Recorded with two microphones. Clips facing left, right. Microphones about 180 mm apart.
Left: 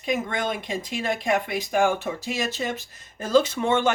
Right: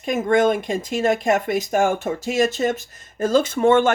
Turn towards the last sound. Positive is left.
turn(degrees=-50)  # may be behind; listen again after turning